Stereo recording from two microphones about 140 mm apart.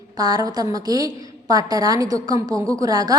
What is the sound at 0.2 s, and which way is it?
A woman's voice, 25° right (ahead or behind).